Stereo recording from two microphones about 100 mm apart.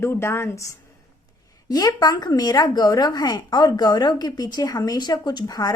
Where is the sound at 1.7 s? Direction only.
40° left (ahead or behind).